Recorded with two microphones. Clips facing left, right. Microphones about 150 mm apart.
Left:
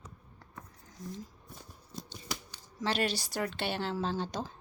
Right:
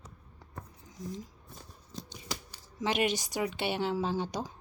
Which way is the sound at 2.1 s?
15° right (ahead or behind).